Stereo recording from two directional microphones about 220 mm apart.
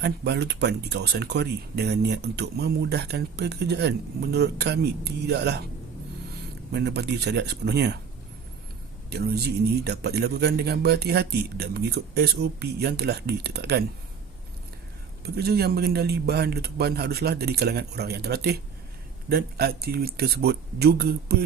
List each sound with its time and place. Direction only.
0.0 s speech: 50° right (ahead or behind)
6.7 s speech: 50° right (ahead or behind)
9.0 s speech: 45° right (ahead or behind)
15.2 s speech: 45° right (ahead or behind)